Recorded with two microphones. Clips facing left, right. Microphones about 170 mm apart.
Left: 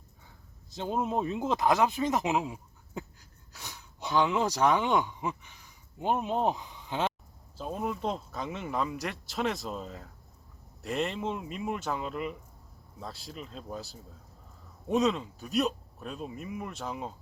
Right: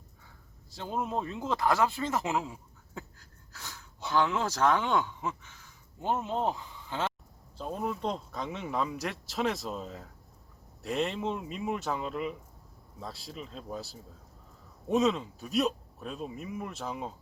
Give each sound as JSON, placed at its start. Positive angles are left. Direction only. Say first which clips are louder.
{"t": 0.7, "sound": "speech", "louder": "left 3 dB", "side_deg": 20}
{"t": 7.6, "sound": "speech", "louder": "even", "side_deg": 5}